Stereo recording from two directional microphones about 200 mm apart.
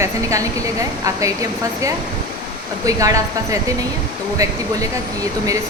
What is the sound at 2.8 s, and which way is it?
Speech, 15° right (ahead or behind).